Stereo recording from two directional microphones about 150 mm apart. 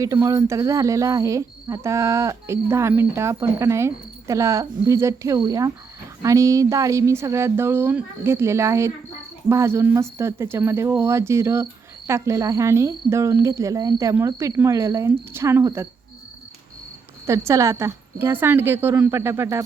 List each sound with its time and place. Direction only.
0.0 s speech: 20° right (ahead or behind)
17.2 s speech: 20° right (ahead or behind)